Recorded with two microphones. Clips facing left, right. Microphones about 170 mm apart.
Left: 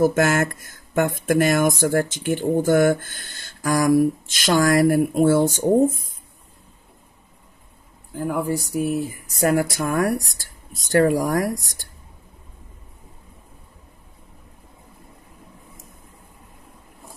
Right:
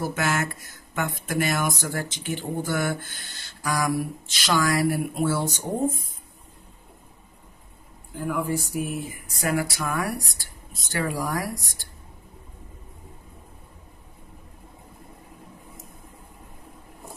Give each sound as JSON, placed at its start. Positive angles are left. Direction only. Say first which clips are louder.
{"t": 0.0, "sound": "speech", "louder": "left 8 dB", "side_deg": 45}
{"t": 8.1, "sound": "speech", "louder": "left 3 dB", "side_deg": 40}